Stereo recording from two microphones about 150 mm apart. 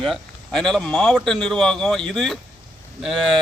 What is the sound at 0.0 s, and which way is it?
Speech, 5° left (ahead or behind).